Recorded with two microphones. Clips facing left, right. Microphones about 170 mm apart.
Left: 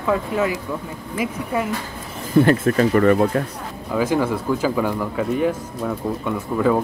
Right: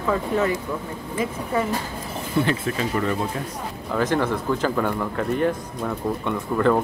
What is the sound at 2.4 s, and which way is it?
Speech, 50° left (ahead or behind).